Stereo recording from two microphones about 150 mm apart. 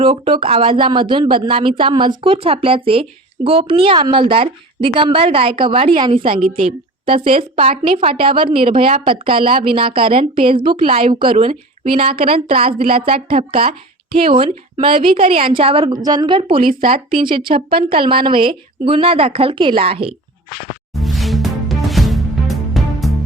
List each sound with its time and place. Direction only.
0.0 s speech: 35° right (ahead or behind)
16.0 s speech: 25° right (ahead or behind)
20.9 s music: centre (ahead or behind)